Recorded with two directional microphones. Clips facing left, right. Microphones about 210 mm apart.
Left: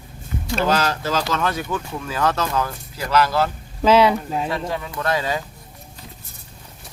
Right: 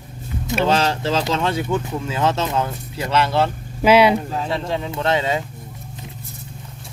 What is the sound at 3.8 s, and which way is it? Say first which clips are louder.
Speech: right 1 dB; 10° right (ahead or behind).